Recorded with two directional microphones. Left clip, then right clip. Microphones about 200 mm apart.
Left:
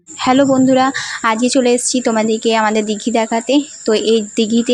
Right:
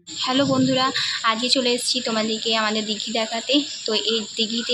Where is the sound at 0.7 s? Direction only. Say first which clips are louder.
Left 7 dB; 35° left (ahead or behind).